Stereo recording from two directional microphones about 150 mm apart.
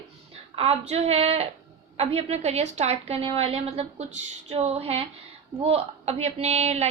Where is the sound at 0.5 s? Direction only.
40° right (ahead or behind).